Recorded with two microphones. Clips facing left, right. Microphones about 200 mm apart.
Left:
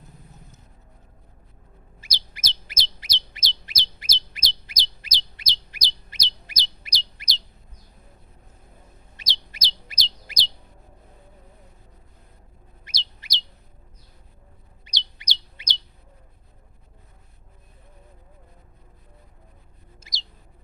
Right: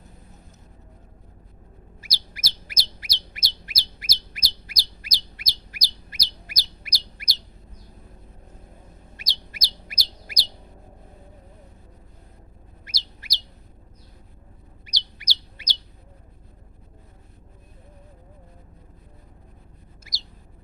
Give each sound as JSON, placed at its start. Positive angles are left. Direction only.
{"t": 2.0, "sound": "bird", "side_deg": 20}
{"t": 9.1, "sound": "bird", "side_deg": 25}
{"t": 12.8, "sound": "bird", "side_deg": 20}
{"t": 14.8, "sound": "bird", "side_deg": 20}
{"t": 20.1, "sound": "bird", "side_deg": 25}